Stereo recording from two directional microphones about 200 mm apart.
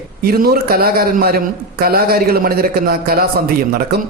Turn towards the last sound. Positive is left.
turn(degrees=-50)  # may be behind; listen again after turning